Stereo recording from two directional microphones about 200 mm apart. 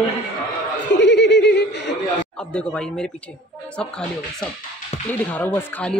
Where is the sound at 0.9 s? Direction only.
60° left (ahead or behind).